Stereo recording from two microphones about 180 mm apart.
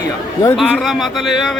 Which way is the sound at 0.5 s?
Centre (ahead or behind).